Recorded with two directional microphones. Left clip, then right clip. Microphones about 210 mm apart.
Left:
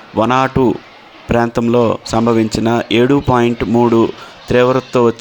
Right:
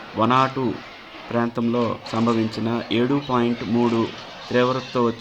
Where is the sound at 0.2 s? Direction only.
45° left (ahead or behind).